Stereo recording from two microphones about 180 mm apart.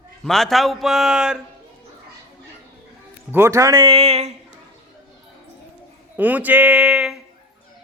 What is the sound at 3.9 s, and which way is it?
Speech, 35° right (ahead or behind).